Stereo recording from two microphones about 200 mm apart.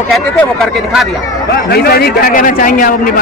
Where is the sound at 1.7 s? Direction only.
50° left (ahead or behind).